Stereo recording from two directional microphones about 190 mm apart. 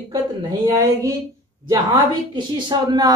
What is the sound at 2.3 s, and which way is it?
Speech, 25° right (ahead or behind).